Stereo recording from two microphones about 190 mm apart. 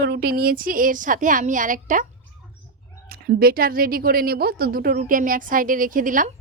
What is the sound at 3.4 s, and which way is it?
A woman's voice, 50° right (ahead or behind).